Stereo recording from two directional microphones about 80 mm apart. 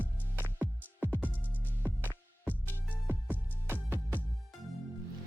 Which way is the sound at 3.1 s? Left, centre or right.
Right.